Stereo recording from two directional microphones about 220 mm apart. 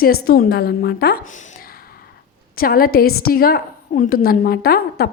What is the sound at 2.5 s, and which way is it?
A woman's voice, 40° left (ahead or behind).